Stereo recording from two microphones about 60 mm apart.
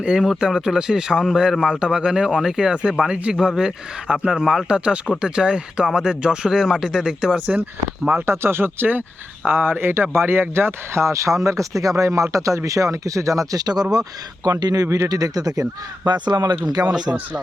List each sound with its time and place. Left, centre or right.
0.0 s speech: centre
1.8 s speech: centre
7.3 s speech: right
8.3 s speech: right
15.1 s speech: right
16.9 s speech: centre